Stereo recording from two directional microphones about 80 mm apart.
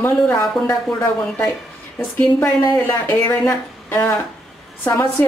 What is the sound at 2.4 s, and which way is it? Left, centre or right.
Speech, left.